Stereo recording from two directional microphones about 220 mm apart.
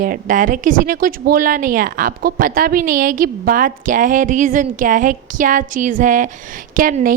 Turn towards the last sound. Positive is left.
turn(degrees=-40)  # may be behind; listen again after turning